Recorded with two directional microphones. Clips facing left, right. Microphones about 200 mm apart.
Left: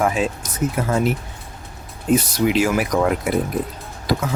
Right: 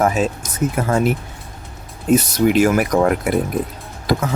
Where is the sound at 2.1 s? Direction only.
50° right (ahead or behind).